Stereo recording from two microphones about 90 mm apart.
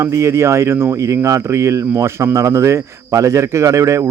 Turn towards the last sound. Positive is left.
turn(degrees=-35)  # may be behind; listen again after turning